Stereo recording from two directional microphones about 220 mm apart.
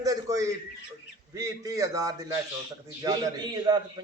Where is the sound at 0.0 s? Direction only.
15° right (ahead or behind).